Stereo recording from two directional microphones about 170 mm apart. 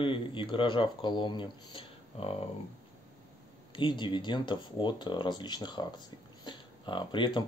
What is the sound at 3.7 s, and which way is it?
Speech, 30° left (ahead or behind).